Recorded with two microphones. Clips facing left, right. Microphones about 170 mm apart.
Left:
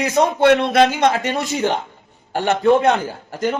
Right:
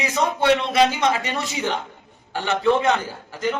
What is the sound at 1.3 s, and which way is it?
A man's voice, 40° left (ahead or behind).